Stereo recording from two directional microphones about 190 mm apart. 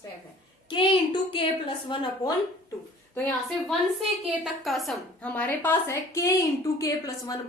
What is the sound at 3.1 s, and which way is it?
A woman's voice, 5° left (ahead or behind).